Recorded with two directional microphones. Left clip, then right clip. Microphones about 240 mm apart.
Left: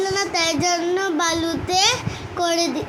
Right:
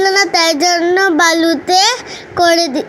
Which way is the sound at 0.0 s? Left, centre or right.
Right.